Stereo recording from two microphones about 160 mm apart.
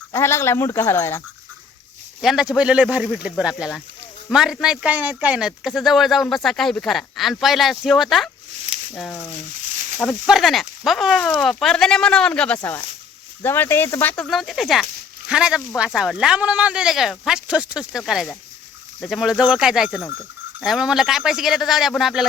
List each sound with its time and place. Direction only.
0.1 s speech: 15° left (ahead or behind)
2.2 s a man's voice: 5° right (ahead or behind)
10.0 s a man's voice: centre (ahead or behind)
14.3 s a man's voice: centre (ahead or behind)